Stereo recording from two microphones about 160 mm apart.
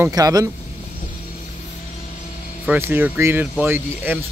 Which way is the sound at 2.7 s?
15° right (ahead or behind).